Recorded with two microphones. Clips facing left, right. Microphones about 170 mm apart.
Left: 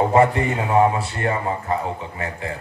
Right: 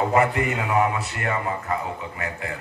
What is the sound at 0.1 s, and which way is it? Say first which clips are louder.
A man's voice: left 4 dB; 30° left (ahead or behind).